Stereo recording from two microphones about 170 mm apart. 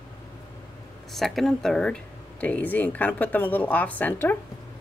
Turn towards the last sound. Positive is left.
turn(degrees=10)  # may be behind; listen again after turning